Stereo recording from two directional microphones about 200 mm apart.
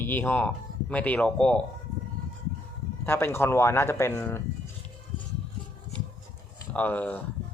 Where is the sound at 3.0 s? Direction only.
10° left (ahead or behind).